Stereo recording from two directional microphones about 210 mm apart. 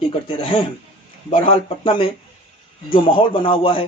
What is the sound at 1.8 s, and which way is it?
Speech, 25° left (ahead or behind).